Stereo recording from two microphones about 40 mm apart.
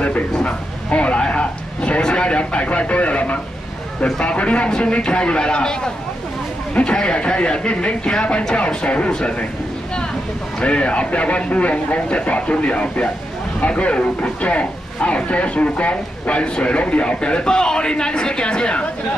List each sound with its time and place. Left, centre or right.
0.4 s speech: left
10.6 s speech: left